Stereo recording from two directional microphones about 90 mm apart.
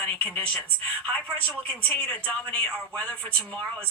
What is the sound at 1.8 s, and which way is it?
Speech, 15° left (ahead or behind).